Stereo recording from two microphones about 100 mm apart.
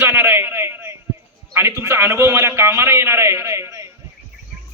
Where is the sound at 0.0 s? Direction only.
20° right (ahead or behind).